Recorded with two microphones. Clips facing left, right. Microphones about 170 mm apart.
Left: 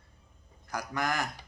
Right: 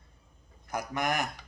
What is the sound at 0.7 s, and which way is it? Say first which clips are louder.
Speech: right 2 dB; 20° right (ahead or behind).